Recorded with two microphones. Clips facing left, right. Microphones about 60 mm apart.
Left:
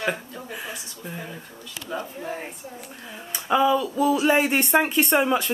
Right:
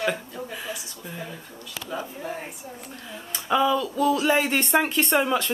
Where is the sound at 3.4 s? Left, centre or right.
Centre.